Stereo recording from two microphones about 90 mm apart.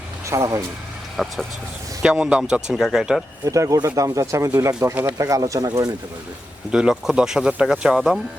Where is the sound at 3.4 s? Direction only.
40° right (ahead or behind).